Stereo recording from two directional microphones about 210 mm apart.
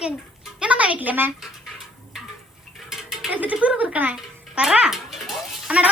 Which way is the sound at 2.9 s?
Centre (ahead or behind).